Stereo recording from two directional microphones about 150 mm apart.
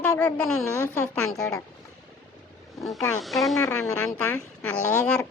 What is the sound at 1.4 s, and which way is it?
Speech, 20° left (ahead or behind).